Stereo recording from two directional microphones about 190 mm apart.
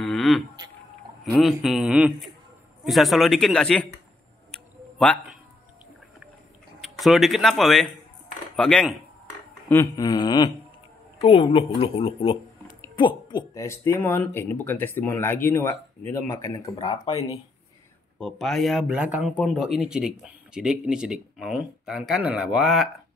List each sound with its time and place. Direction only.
0.0 s a sound: centre (ahead or behind)
1.3 s speech: centre (ahead or behind)
4.5 s a sound: 5° left (ahead or behind)
6.8 s speech: centre (ahead or behind)
9.7 s speech: 15° left (ahead or behind)
18.2 s speech: centre (ahead or behind)